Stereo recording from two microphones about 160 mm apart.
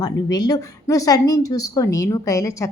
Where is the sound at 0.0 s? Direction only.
25° left (ahead or behind).